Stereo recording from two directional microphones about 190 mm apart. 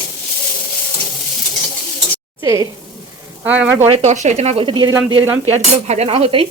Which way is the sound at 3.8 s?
35° right (ahead or behind).